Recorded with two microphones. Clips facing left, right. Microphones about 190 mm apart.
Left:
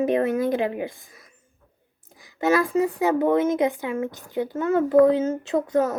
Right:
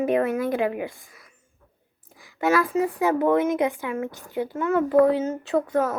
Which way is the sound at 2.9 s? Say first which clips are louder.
Right 1 dB; 25° left (ahead or behind).